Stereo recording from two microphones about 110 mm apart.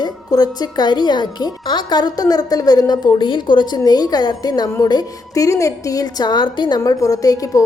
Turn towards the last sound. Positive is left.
turn(degrees=30)  # may be behind; listen again after turning